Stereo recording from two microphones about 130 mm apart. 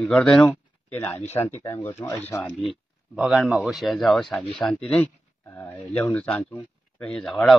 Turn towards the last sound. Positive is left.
turn(degrees=5)  # may be behind; listen again after turning